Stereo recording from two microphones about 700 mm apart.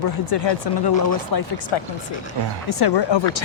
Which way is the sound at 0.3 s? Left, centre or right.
Left.